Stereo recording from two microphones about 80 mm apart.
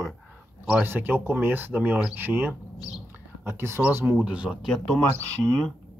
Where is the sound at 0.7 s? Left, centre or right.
Right.